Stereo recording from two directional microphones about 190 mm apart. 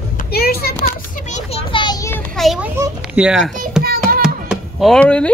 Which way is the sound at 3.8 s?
50° right (ahead or behind).